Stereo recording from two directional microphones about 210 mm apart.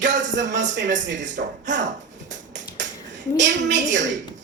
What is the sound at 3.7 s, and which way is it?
Speech, 35° right (ahead or behind).